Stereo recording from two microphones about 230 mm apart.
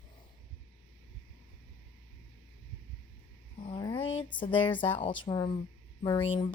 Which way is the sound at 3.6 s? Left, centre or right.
Centre.